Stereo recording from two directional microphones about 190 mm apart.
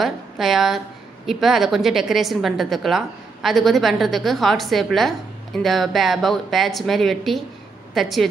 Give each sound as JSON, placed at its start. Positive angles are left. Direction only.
{"t": 0.0, "sound": "a woman's voice", "side_deg": 0}